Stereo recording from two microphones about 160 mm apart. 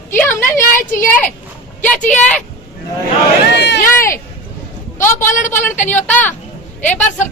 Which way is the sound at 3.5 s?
90° left.